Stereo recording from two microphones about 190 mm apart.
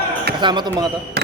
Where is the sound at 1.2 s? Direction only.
60° right (ahead or behind).